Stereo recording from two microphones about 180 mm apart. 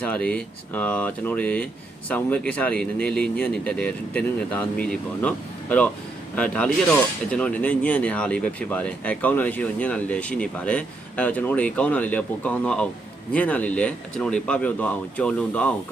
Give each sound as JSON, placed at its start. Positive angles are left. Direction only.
{"t": 0.0, "sound": "speech", "side_deg": 5}